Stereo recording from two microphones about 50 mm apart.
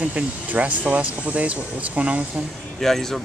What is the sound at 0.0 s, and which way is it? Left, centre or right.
Speech, right.